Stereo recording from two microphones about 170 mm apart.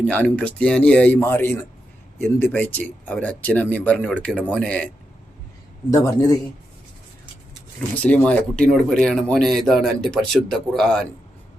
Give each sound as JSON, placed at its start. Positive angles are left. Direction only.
{"t": 0.0, "sound": "speech", "side_deg": 5}
{"t": 5.9, "sound": "speech", "side_deg": 20}
{"t": 8.0, "sound": "speech", "side_deg": 5}